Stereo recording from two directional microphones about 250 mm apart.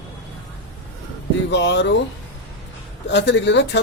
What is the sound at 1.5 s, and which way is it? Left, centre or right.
Speech, left.